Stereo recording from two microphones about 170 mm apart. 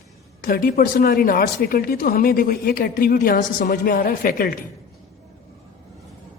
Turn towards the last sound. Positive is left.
turn(degrees=60)  # may be behind; listen again after turning